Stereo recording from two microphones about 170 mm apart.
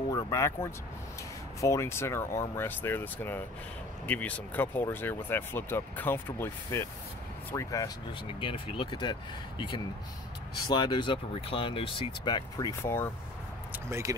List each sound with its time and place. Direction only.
0.1 s speech: 20° left (ahead or behind)
8.4 s speech: 30° left (ahead or behind); by 13.1 s 15° left (ahead or behind)
13.8 s speech: 15° right (ahead or behind)